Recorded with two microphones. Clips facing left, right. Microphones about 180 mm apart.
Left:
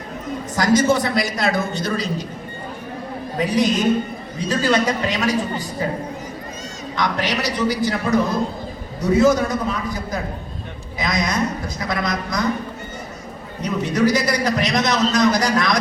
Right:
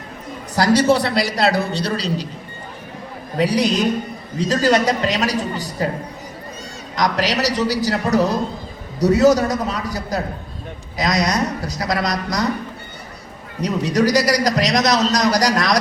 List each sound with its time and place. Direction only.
0.5 s a man's voice: 35° right (ahead or behind)
3.4 s a man's voice: 35° right (ahead or behind)
6.9 s a man's voice: 40° right (ahead or behind)
13.7 s a man's voice: 40° right (ahead or behind)